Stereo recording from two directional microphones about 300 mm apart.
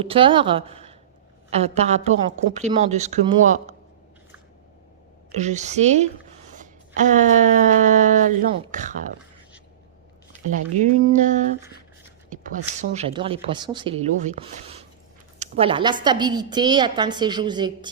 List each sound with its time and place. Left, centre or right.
0.0 s a woman's voice: centre
5.4 s speech: right
6.5 s a sound: right
10.8 s speech: right
12.9 s a woman's voice: right